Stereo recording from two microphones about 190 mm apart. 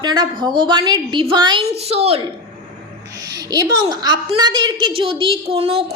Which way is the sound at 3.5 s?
20° right (ahead or behind).